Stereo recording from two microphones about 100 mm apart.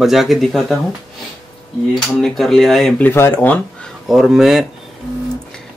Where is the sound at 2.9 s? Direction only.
20° left (ahead or behind).